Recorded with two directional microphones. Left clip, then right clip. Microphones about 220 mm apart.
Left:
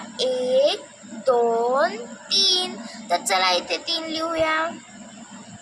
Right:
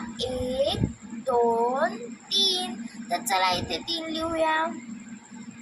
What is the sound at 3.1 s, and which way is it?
Speech, 25° left (ahead or behind).